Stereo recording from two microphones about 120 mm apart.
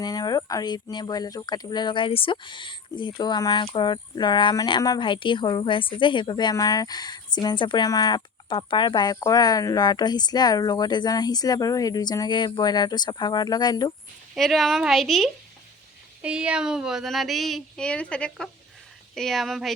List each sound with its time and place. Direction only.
0.0 s speech: 35° left (ahead or behind)
14.3 s speech: centre (ahead or behind)